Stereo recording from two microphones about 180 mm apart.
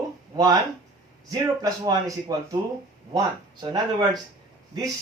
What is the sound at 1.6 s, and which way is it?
Speech, 20° right (ahead or behind).